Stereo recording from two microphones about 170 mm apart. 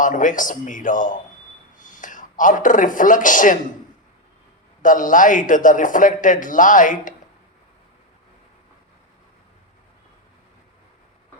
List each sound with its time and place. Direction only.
0.0 s speech: 50° left (ahead or behind)
4.8 s speech: 50° left (ahead or behind)